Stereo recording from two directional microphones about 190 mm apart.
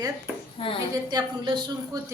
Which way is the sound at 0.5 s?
30° left (ahead or behind).